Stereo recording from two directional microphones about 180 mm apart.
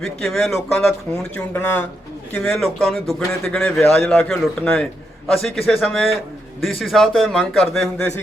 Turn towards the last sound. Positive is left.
turn(degrees=0)  # may be behind; listen again after turning